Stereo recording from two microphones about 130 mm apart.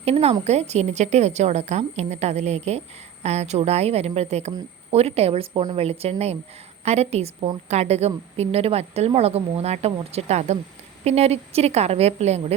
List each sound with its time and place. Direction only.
0.0 s a woman's voice: 50° right (ahead or behind)